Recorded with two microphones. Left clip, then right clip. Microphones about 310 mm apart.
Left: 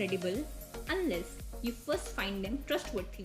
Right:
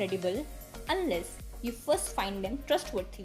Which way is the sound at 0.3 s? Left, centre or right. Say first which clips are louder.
Right 3 dB; centre.